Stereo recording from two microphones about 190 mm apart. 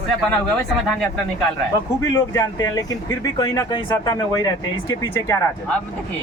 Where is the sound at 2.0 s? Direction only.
20° left (ahead or behind).